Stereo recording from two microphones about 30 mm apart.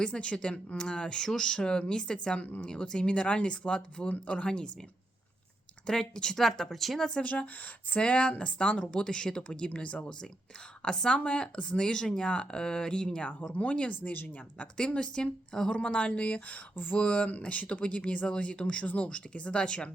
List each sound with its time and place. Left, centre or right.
0.0 s speech: left
3.0 s speech: left
5.8 s speech: left
6.3 s speech: centre
7.3 s speech: left
7.9 s speech: left
9.6 s speech: left
10.8 s speech: left
11.8 s speech: left
13.5 s speech: left
14.0 s speech: left
14.6 s speech: left
16.9 s speech: left
17.2 s speech: left